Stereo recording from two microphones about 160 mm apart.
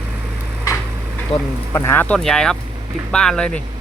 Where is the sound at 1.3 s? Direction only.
35° left (ahead or behind).